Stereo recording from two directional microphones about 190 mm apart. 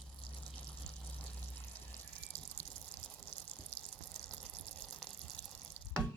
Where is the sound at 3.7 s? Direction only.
35° left (ahead or behind).